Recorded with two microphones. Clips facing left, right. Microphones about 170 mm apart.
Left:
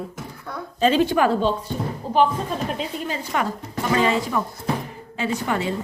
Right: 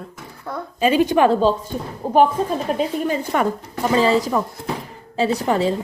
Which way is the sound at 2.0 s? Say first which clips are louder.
Right 4 dB; 50° right (ahead or behind).